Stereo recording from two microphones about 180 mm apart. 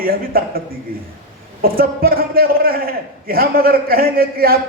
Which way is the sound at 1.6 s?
55° right (ahead or behind).